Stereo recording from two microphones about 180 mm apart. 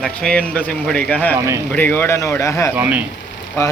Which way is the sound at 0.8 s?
5° left (ahead or behind).